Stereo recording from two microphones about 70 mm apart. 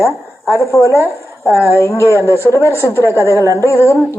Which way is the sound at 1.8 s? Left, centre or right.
Left.